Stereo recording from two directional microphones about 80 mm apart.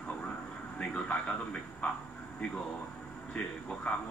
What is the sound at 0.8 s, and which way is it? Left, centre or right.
Speech, centre.